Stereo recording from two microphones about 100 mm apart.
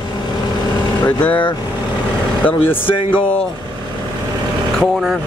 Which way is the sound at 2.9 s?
60° left (ahead or behind).